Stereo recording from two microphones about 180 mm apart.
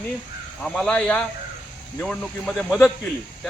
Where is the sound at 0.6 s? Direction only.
5° left (ahead or behind).